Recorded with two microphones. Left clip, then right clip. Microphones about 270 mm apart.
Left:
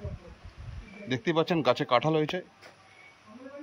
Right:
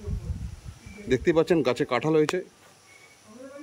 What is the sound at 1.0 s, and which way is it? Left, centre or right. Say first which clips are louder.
A man's voice: right 6 dB; centre.